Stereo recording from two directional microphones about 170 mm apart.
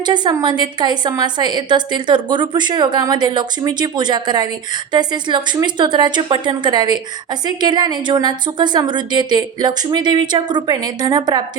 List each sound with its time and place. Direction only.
0.0 s a woman's voice: 25° right (ahead or behind)